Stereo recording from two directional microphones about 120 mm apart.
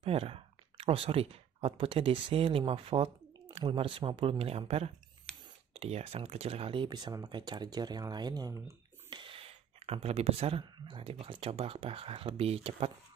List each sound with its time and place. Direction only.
0.0 s speech: 55° right (ahead or behind); by 9.2 s 30° right (ahead or behind)
9.2 s a sound: 50° right (ahead or behind)
10.6 s speech: 45° right (ahead or behind)